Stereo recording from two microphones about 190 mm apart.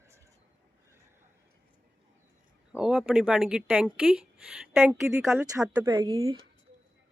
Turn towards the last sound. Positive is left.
turn(degrees=-15)  # may be behind; listen again after turning